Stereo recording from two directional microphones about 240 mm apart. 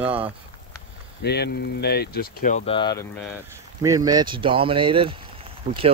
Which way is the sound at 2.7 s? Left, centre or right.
Centre.